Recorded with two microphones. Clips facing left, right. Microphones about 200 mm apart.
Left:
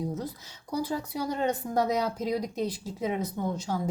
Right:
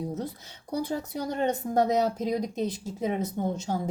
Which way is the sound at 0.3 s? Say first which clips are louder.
Right 1 dB; 55° right (ahead or behind).